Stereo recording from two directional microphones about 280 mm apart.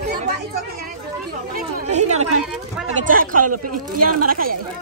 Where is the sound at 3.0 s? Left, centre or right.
Right.